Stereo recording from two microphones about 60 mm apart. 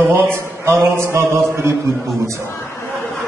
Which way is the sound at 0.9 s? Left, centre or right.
Right.